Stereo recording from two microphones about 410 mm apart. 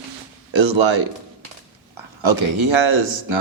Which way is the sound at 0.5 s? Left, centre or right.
Right.